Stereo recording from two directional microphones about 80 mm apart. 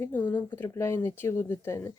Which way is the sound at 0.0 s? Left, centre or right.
Left.